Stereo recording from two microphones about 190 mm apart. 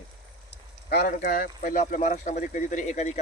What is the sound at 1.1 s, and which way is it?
Speech, 45° left (ahead or behind).